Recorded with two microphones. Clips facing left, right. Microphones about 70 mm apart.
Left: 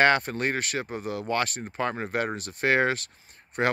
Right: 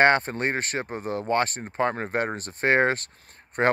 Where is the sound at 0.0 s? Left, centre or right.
Right.